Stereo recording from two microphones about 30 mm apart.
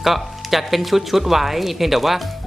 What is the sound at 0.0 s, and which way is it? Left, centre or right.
Speech, centre.